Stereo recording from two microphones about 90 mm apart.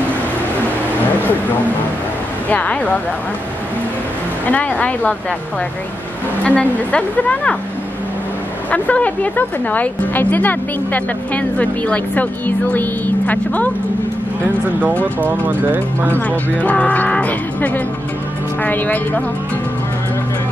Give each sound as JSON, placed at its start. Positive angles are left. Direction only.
{"t": 2.5, "sound": "a woman's voice", "side_deg": 15}
{"t": 4.5, "sound": "a woman's voice", "side_deg": 15}
{"t": 6.4, "sound": "a woman's voice", "side_deg": 15}
{"t": 8.6, "sound": "a woman's voice", "side_deg": 15}
{"t": 15.1, "sound": "speech", "side_deg": -20}
{"t": 16.2, "sound": "a woman's voice", "side_deg": 15}